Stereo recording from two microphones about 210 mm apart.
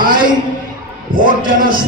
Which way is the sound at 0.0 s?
40° right (ahead or behind).